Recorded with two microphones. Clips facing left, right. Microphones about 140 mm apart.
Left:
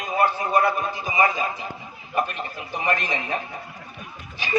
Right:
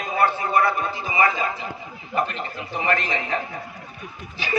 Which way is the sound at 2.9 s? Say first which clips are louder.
Right 1 dB; 20° left (ahead or behind).